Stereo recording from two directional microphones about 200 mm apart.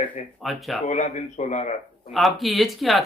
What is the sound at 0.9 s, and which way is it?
Speech, 35° left (ahead or behind).